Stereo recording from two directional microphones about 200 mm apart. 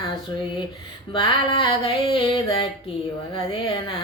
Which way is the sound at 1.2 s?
25° left (ahead or behind).